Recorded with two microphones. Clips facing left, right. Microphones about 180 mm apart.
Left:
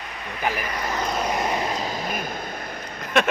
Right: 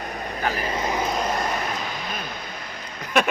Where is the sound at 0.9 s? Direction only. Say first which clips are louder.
Left 1 dB; 5° right (ahead or behind).